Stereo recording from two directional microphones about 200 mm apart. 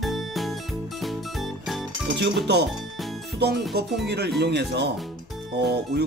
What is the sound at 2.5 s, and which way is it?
Speech, 55° right (ahead or behind).